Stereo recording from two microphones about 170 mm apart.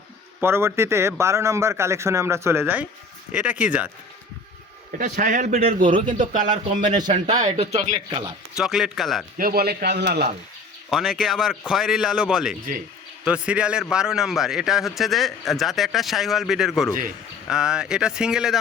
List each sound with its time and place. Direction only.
0.4 s speech: 15° right (ahead or behind)
4.9 s a man's voice: 50° right (ahead or behind)
6.9 s speech: 25° right (ahead or behind)
7.3 s speech: 40° right (ahead or behind)
8.5 s a man's voice: centre (ahead or behind)
9.4 s a man's voice: 65° right (ahead or behind)
10.9 s a man's voice: centre (ahead or behind)